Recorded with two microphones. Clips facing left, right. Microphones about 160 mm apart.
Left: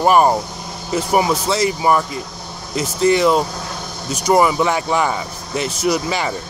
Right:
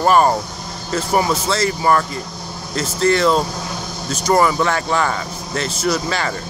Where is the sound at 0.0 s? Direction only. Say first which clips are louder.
Left 1 dB; 15° left (ahead or behind).